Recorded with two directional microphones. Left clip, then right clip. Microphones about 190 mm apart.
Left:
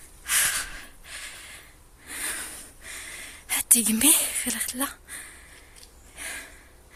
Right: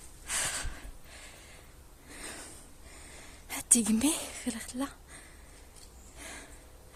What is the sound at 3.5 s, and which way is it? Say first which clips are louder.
Speech: left 4 dB; centre (ahead or behind).